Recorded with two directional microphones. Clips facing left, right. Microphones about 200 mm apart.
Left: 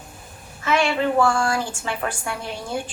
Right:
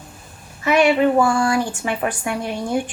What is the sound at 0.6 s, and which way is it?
A woman's voice, 20° right (ahead or behind).